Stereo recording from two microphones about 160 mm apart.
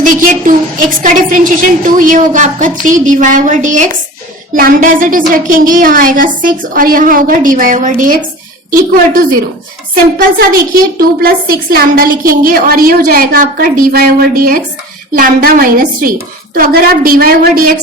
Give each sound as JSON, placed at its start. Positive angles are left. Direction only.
{"t": 0.0, "sound": "a woman's voice", "side_deg": -60}
{"t": 9.9, "sound": "a woman's voice", "side_deg": -65}